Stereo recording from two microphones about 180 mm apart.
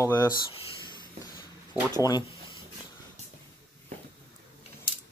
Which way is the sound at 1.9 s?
20° left (ahead or behind).